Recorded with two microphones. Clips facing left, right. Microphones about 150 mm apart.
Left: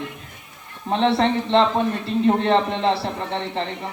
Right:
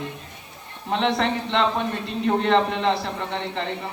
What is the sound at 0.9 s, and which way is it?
Speech, 35° left (ahead or behind).